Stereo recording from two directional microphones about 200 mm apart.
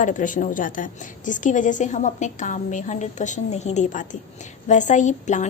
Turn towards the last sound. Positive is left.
turn(degrees=35)  # may be behind; listen again after turning